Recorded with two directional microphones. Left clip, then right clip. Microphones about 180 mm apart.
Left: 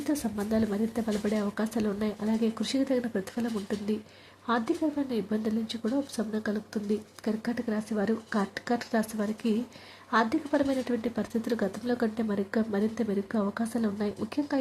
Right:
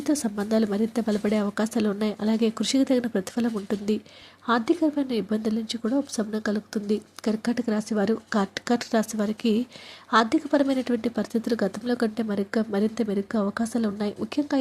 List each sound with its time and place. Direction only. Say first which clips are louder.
0.0 s a woman's voice: right 5 dB; 20° right (ahead or behind)